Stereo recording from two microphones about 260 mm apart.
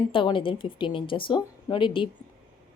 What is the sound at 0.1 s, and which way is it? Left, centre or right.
A woman's voice, centre.